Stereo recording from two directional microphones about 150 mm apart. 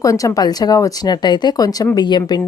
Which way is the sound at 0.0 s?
20° left (ahead or behind).